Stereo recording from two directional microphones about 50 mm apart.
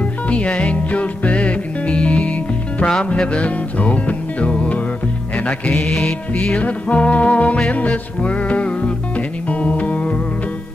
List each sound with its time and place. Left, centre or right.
0.3 s music: left